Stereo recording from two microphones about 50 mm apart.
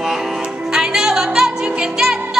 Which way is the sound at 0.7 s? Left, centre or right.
Centre.